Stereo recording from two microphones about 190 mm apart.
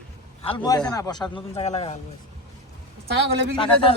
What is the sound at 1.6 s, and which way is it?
Speech, 35° left (ahead or behind).